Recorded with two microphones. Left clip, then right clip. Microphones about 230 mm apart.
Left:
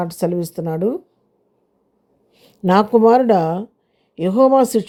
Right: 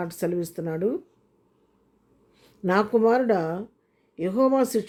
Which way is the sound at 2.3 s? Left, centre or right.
Left.